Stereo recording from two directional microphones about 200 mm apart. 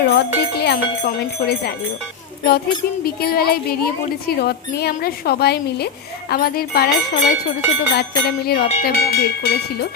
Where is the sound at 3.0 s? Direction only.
50° left (ahead or behind).